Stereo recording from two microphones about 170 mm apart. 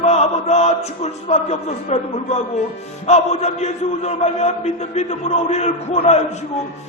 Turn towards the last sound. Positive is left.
turn(degrees=40)  # may be behind; listen again after turning